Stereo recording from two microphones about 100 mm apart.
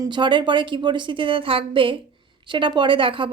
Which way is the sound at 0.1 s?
50° right (ahead or behind).